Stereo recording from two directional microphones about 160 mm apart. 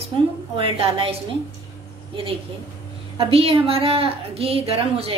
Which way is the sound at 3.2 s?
35° right (ahead or behind).